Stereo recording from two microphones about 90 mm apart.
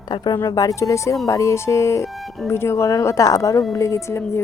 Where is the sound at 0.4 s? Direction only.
40° left (ahead or behind).